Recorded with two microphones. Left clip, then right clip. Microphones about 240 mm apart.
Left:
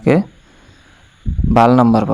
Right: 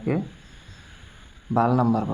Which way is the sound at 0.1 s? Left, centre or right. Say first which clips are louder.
Left 13 dB; left.